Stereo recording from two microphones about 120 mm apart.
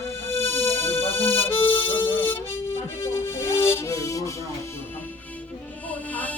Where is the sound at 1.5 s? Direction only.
45° left (ahead or behind).